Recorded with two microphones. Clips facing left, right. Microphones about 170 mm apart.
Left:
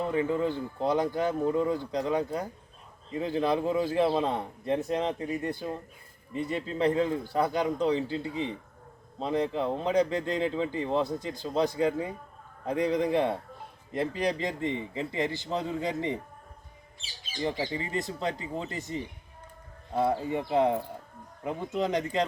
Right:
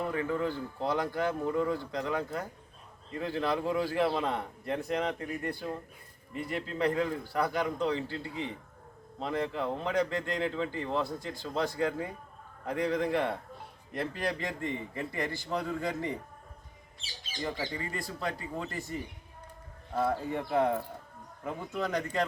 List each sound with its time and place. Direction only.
0.0 s a man's voice: 20° left (ahead or behind)
17.4 s a man's voice: 20° left (ahead or behind)